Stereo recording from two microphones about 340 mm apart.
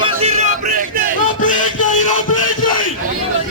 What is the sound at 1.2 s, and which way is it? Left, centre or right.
Music, left.